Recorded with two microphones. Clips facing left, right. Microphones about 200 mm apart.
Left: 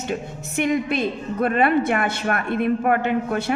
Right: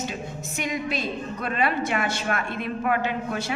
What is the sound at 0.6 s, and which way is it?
A woman's voice, 55° left (ahead or behind).